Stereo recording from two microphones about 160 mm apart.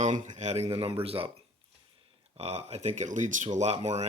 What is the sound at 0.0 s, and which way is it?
Speech, 50° right (ahead or behind).